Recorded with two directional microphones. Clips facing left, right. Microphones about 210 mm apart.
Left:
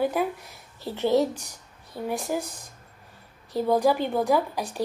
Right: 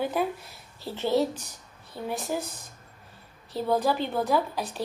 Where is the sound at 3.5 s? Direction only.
15° left (ahead or behind).